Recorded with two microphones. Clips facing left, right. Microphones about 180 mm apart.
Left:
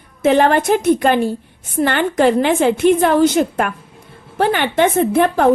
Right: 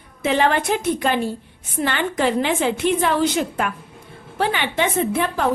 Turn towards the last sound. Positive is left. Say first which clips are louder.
# left 7 dB
turn(degrees=55)  # may be behind; listen again after turning